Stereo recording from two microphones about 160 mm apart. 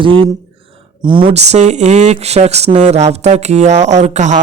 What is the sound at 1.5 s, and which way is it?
Speech, 45° right (ahead or behind).